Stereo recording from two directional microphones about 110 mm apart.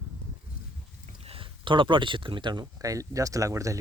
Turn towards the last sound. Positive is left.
turn(degrees=-30)  # may be behind; listen again after turning